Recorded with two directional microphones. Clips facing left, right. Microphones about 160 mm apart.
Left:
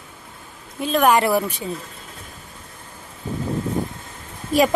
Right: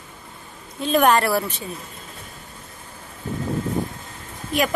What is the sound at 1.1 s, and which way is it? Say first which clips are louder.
Speech: left 2 dB; 15° left (ahead or behind).